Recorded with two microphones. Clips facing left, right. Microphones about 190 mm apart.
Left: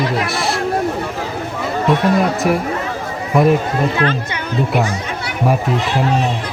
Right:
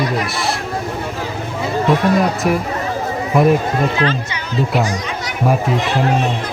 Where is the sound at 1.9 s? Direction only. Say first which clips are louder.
Even; centre (ahead or behind).